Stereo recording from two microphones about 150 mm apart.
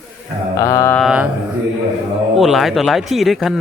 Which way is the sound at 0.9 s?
5° right (ahead or behind).